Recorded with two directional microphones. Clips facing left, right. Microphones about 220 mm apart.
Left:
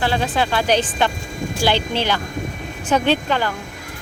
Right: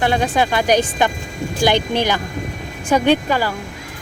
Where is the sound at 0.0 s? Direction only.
15° right (ahead or behind).